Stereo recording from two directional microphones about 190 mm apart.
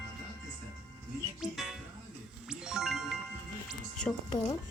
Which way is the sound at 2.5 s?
5° right (ahead or behind).